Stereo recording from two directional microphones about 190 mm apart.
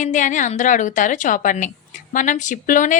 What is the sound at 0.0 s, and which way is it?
A woman's voice, 40° left (ahead or behind).